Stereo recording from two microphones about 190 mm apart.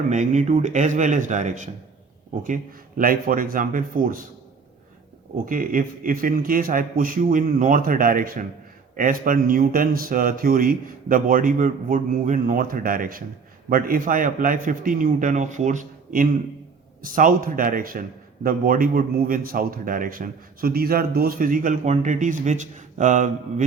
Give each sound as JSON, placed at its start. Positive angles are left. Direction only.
{"t": 0.1, "sound": "a man's voice", "side_deg": -40}
{"t": 3.0, "sound": "a man's voice", "side_deg": -50}
{"t": 5.5, "sound": "a man's voice", "side_deg": -45}